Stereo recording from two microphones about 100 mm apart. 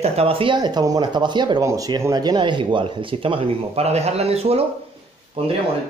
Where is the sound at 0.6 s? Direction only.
45° right (ahead or behind).